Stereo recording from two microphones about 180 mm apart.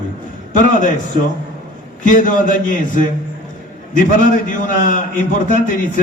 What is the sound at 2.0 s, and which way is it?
A man's voice, 45° left (ahead or behind).